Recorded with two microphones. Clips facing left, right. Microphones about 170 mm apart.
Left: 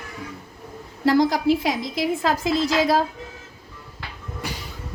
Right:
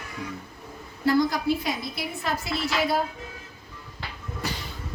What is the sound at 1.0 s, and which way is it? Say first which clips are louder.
A woman's voice: left 4 dB; 90° left.